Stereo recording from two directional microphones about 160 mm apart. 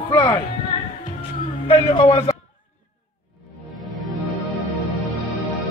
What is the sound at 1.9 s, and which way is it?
Speech, 35° left (ahead or behind).